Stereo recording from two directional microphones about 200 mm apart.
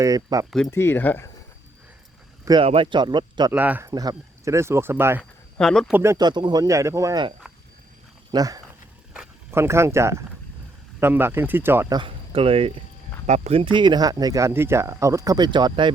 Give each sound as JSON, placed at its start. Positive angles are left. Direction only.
{"t": 0.0, "sound": "speech", "side_deg": -15}
{"t": 0.7, "sound": "speech", "side_deg": 10}
{"t": 2.4, "sound": "speech", "side_deg": -20}
{"t": 3.5, "sound": "speech", "side_deg": -10}
{"t": 5.5, "sound": "speech", "side_deg": 5}
{"t": 5.9, "sound": "speech", "side_deg": -15}
{"t": 9.1, "sound": "speech", "side_deg": -10}
{"t": 11.9, "sound": "speech", "side_deg": -25}